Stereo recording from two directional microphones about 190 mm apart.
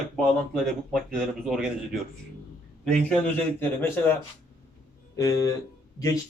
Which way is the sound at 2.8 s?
5° left (ahead or behind).